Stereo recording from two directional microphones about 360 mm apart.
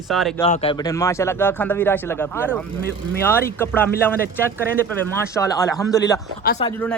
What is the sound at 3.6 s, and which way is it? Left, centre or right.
Speech, centre.